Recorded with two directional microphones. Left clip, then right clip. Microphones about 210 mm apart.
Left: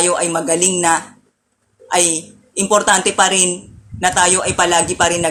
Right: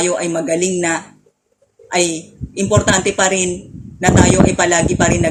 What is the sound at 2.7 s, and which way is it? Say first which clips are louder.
Speech: left 2 dB; 15° right (ahead or behind).